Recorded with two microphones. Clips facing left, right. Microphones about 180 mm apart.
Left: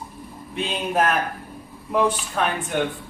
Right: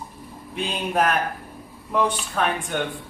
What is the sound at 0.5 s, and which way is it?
Speech, centre (ahead or behind).